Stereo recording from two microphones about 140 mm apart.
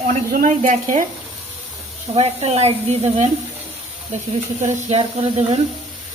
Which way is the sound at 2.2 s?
45° right (ahead or behind).